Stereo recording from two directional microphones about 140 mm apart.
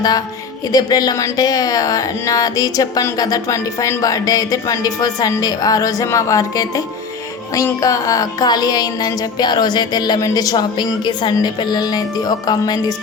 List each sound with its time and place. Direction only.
0.7 s speech: 25° left (ahead or behind)